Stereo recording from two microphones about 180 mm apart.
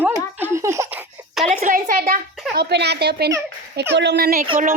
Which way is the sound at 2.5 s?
70° right (ahead or behind).